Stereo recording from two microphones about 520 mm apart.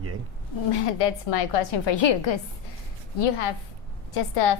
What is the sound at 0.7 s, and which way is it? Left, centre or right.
Speech, left.